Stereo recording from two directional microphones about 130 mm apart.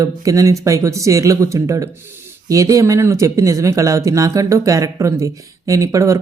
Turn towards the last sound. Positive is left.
turn(degrees=-25)  # may be behind; listen again after turning